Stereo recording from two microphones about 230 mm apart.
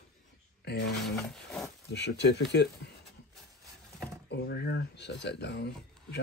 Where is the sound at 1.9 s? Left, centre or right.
Left.